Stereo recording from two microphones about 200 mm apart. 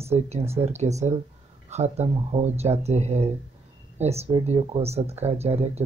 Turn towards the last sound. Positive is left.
turn(degrees=-30)  # may be behind; listen again after turning